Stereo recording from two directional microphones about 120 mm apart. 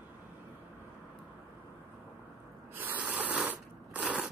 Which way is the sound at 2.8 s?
15° right (ahead or behind).